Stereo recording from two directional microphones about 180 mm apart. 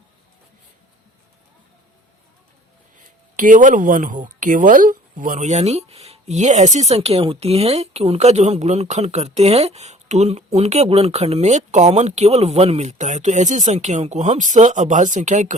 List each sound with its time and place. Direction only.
3.3 s speech: 45° right (ahead or behind)